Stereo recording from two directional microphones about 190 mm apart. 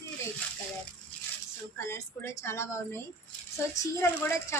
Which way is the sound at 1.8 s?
15° left (ahead or behind).